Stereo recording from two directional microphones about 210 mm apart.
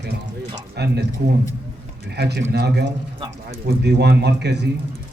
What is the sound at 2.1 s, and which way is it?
Speech, 50° right (ahead or behind).